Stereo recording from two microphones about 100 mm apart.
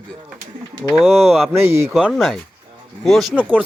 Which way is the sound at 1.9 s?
Centre (ahead or behind).